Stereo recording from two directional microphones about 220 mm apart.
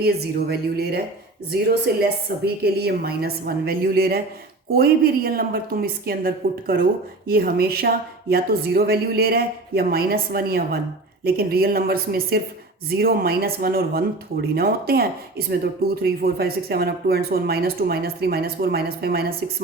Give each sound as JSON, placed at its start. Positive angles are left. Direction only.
{"t": 0.0, "sound": "speech", "side_deg": -45}